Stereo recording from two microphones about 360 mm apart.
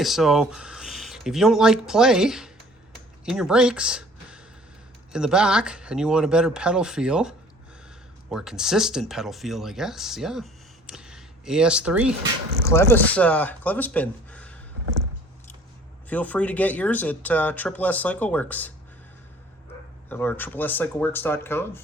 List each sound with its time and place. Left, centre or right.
0.0 s speech: centre
16.0 s speech: centre
20.1 s speech: centre